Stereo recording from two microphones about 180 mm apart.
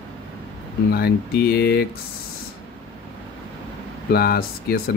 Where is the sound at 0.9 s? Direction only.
60° left (ahead or behind).